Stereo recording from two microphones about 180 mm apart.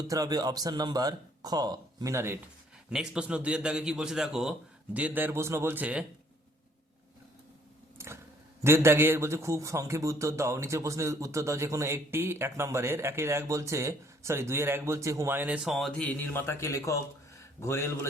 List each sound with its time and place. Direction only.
0.1 s a man's voice: 20° right (ahead or behind)
7.9 s vehicle: 15° right (ahead or behind)
8.6 s a man's voice: 15° right (ahead or behind); by 18.1 s 15° left (ahead or behind)